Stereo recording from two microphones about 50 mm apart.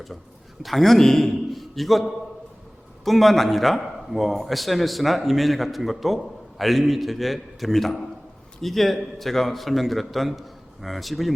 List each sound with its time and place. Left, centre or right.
0.6 s a man's voice: centre